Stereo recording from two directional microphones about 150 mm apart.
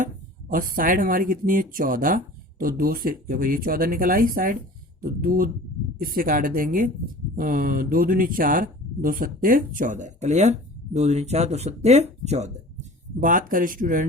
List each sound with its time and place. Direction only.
0.5 s speech: 65° right (ahead or behind); by 12.5 s 45° right (ahead or behind)
13.1 s speech: 65° right (ahead or behind)